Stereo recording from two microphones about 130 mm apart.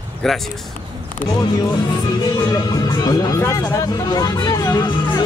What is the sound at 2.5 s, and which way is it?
Music, 30° left (ahead or behind).